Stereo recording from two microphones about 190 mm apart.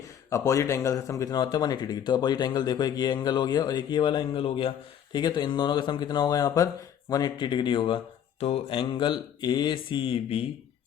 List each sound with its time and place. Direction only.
0.3 s speech: 15° left (ahead or behind)